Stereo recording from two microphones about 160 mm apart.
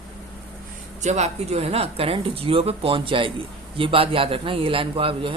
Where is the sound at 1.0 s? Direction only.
45° right (ahead or behind).